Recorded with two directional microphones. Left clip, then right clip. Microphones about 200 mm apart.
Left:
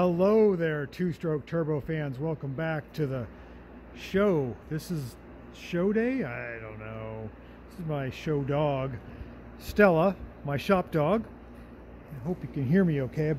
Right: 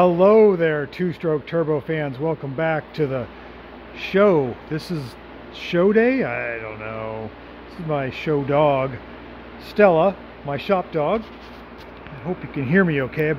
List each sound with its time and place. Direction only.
0.0 s speech: 5° right (ahead or behind)
9.8 s speech: 10° left (ahead or behind); by 11.2 s 25° left (ahead or behind)
12.6 s speech: 5° left (ahead or behind)